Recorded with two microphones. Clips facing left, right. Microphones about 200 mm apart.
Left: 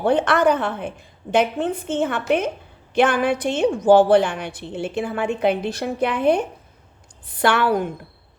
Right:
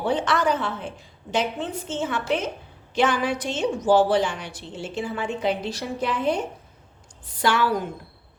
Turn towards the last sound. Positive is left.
turn(degrees=55)  # may be behind; listen again after turning